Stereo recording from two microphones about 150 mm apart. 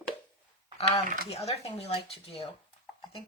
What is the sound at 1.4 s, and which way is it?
Speech, 45° left (ahead or behind).